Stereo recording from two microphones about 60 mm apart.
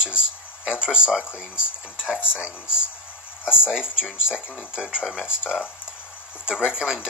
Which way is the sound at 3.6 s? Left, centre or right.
Centre.